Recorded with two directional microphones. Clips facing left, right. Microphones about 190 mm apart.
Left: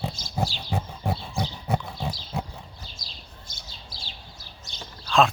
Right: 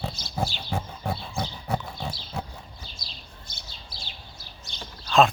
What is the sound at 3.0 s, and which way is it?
Bird, 45° left (ahead or behind).